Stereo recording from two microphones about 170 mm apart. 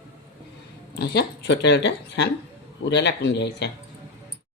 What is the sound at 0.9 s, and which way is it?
Speech, 70° left (ahead or behind).